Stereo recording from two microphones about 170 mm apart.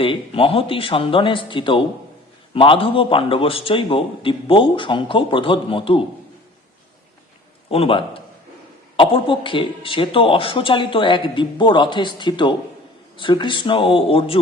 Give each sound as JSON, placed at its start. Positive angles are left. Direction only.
{"t": 0.0, "sound": "a man's voice", "side_deg": 30}
{"t": 7.7, "sound": "a man's voice", "side_deg": 35}